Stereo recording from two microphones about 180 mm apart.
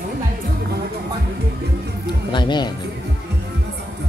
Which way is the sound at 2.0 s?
25° left (ahead or behind).